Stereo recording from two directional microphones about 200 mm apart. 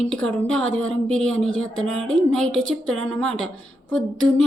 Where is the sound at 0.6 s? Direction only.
85° right.